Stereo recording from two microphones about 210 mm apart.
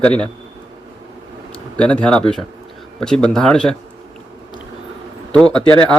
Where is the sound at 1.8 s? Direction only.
5° left (ahead or behind).